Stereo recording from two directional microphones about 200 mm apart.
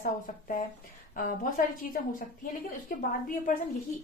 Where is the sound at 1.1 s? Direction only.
45° left (ahead or behind).